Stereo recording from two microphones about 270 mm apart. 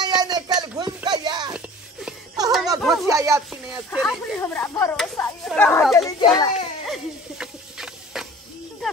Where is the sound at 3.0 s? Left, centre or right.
Centre.